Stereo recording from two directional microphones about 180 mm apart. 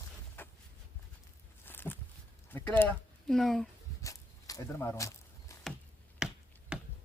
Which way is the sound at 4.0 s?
15° left (ahead or behind).